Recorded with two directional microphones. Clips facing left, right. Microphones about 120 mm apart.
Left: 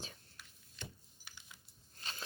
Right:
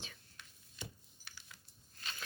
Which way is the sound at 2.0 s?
30° left (ahead or behind).